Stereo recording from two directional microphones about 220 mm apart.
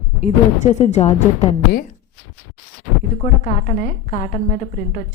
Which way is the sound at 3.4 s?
35° left (ahead or behind).